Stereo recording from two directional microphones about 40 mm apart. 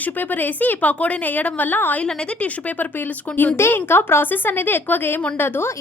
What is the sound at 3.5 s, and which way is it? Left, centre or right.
A woman's voice, left.